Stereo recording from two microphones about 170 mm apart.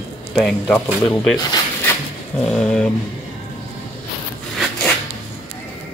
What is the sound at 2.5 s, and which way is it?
Speech, 5° left (ahead or behind).